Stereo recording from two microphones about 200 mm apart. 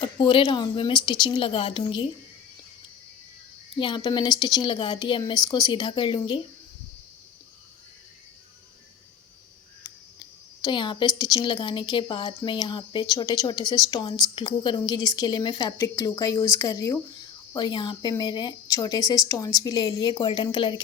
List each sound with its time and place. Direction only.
0.0 s a woman's voice: 25° left (ahead or behind)
3.8 s a woman's voice: 25° left (ahead or behind)
9.8 s a sound: 20° left (ahead or behind)
11.2 s a woman's voice: 20° left (ahead or behind)